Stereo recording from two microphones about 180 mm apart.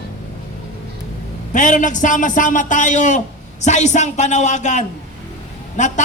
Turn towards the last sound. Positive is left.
turn(degrees=40)  # may be behind; listen again after turning